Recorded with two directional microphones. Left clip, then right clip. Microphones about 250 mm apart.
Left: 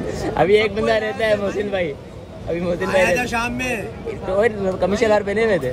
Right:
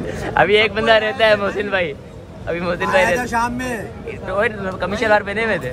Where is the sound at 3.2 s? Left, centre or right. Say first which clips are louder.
Right 2 dB; centre.